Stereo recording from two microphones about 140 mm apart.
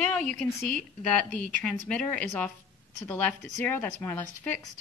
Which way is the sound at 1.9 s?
10° left (ahead or behind).